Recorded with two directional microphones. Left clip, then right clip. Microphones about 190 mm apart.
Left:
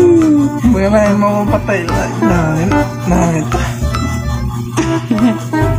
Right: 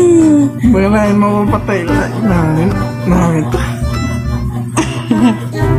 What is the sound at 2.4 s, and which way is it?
Music, centre (ahead or behind).